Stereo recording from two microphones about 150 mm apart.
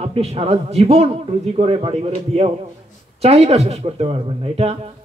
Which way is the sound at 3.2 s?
45° right (ahead or behind).